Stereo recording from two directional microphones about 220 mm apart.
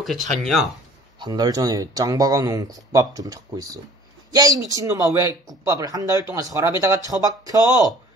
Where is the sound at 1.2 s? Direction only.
20° right (ahead or behind).